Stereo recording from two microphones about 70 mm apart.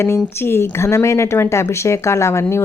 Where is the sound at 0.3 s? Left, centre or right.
Left.